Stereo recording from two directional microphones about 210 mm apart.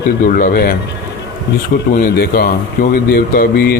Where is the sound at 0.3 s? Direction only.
45° left (ahead or behind).